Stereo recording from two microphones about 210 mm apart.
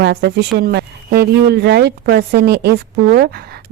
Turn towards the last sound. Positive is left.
turn(degrees=-50)  # may be behind; listen again after turning